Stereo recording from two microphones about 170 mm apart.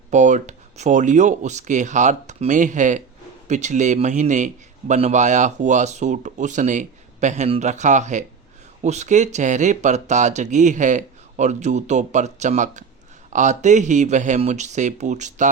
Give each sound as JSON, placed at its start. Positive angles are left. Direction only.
{"t": 0.1, "sound": "a man's voice", "side_deg": -45}